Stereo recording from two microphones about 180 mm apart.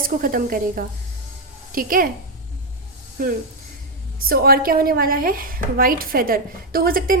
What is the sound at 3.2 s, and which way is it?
A woman's voice, 55° right (ahead or behind).